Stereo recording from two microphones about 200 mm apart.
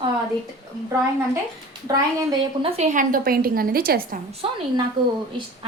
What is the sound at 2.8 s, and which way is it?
A woman's voice, 40° right (ahead or behind).